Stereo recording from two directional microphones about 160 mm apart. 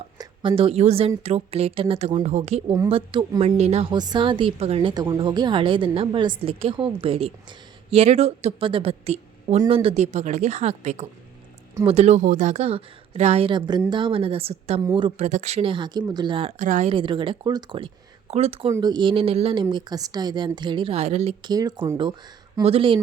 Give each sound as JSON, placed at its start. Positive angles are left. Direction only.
{"t": 0.2, "sound": "a woman's voice", "side_deg": -35}
{"t": 3.9, "sound": "a woman's voice", "side_deg": -30}
{"t": 12.2, "sound": "a woman's voice", "side_deg": -55}
{"t": 16.6, "sound": "speech", "side_deg": -50}
{"t": 16.9, "sound": "a woman's voice", "side_deg": -30}
{"t": 18.7, "sound": "a woman's voice", "side_deg": -25}
{"t": 19.7, "sound": "a woman's voice", "side_deg": -25}
{"t": 21.4, "sound": "a woman's voice", "side_deg": -25}